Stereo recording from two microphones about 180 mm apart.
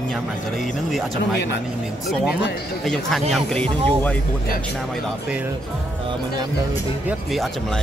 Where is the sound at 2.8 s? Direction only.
Centre (ahead or behind).